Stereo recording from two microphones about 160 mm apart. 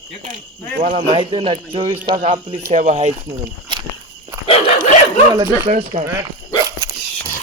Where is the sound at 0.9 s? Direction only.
30° right (ahead or behind).